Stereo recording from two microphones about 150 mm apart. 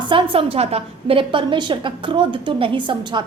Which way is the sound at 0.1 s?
35° right (ahead or behind).